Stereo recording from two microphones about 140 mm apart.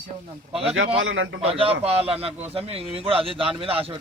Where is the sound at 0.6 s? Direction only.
45° right (ahead or behind).